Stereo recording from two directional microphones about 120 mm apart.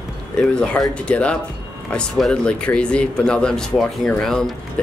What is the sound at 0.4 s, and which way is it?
Speech, 10° left (ahead or behind).